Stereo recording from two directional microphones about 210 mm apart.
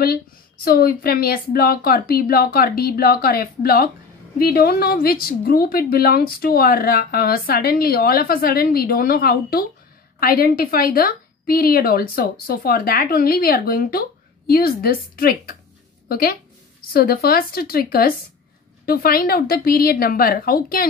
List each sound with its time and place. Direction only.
0.7 s a woman's voice: 45° left (ahead or behind)